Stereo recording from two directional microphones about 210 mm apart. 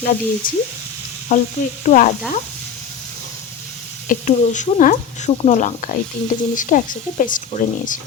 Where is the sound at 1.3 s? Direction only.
35° left (ahead or behind).